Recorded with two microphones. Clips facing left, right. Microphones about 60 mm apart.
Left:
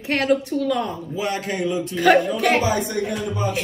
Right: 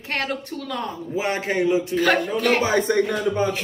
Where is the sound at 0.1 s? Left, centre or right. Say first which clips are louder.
Left 7 dB; centre.